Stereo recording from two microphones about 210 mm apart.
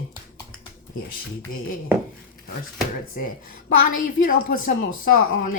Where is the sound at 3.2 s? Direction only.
45° left (ahead or behind).